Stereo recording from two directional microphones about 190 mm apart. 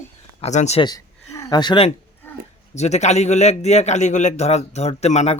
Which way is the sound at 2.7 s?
35° left (ahead or behind).